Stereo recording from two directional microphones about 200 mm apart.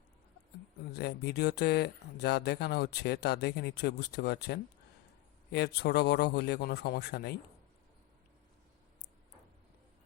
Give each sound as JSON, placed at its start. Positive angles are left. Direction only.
{"t": 0.9, "sound": "speech", "side_deg": 55}